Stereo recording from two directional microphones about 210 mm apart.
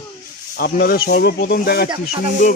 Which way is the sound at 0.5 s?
45° left (ahead or behind).